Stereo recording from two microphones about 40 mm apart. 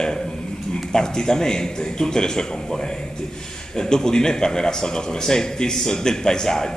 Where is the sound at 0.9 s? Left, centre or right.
Centre.